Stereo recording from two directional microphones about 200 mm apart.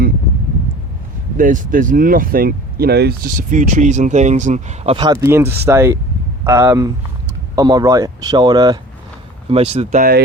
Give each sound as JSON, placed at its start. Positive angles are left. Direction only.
{"t": 1.4, "sound": "speech", "side_deg": -40}